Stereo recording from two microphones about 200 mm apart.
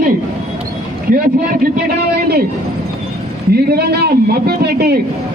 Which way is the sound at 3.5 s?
50° right (ahead or behind).